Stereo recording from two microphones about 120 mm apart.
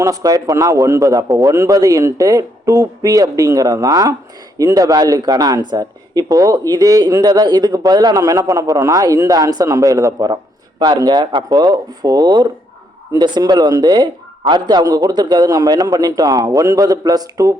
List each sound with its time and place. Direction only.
0.0 s a man's voice: 30° right (ahead or behind)